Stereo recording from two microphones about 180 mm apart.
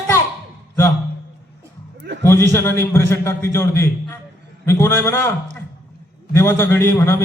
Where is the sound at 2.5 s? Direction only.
15° left (ahead or behind).